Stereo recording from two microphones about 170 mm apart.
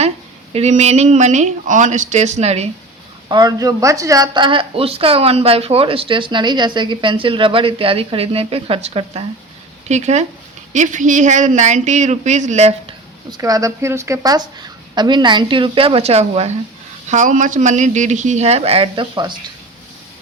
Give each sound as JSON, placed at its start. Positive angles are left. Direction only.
{"t": 0.5, "sound": "a man's voice", "side_deg": -40}
{"t": 3.2, "sound": "a man's voice", "side_deg": -25}
{"t": 13.3, "sound": "a woman's voice", "side_deg": -20}
{"t": 17.1, "sound": "a man's voice", "side_deg": -45}